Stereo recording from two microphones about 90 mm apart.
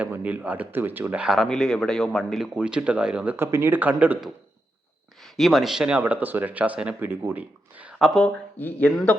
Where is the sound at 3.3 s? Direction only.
30° right (ahead or behind).